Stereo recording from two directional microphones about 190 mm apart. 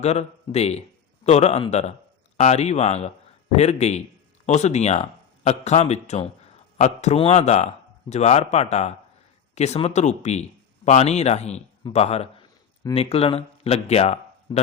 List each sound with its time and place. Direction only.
0.0 s a man's voice: 35° left (ahead or behind)